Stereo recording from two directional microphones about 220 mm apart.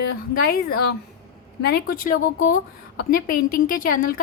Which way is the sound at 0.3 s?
45° left (ahead or behind).